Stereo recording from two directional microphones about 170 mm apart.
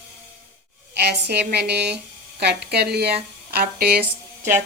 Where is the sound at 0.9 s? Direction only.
75° right (ahead or behind).